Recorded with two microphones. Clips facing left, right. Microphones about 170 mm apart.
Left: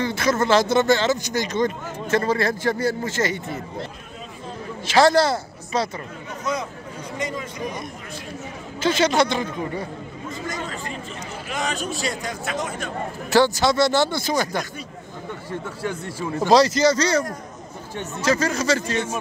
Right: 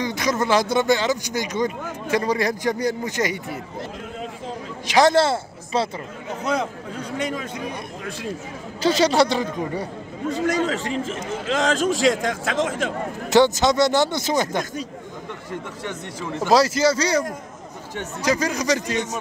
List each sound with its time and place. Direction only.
0.0 s speech: 15° right (ahead or behind)
4.8 s a woman's voice: 15° right (ahead or behind)
6.4 s speech: 65° right (ahead or behind)
8.8 s a man's voice: 35° right (ahead or behind)
10.2 s a man's voice: 75° right (ahead or behind); by 12.9 s 90° right
13.3 s speech: 20° right (ahead or behind)
16.3 s speech: 5° right (ahead or behind)